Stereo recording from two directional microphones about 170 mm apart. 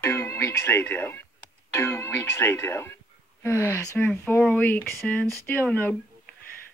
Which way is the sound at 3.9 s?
5° left (ahead or behind).